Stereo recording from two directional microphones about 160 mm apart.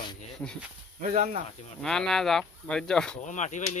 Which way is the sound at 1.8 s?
5° left (ahead or behind).